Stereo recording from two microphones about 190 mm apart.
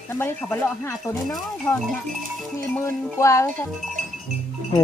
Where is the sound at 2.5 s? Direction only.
15° left (ahead or behind).